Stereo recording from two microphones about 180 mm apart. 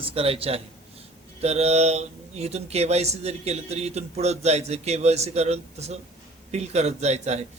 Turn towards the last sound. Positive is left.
turn(degrees=-40)  # may be behind; listen again after turning